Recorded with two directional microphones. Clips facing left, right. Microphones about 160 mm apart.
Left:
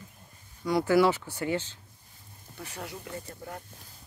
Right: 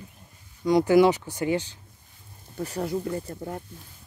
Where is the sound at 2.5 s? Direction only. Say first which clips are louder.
Right 12 dB; 35° right (ahead or behind).